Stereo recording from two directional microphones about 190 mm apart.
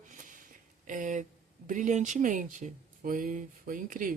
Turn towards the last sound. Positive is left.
turn(degrees=-45)  # may be behind; listen again after turning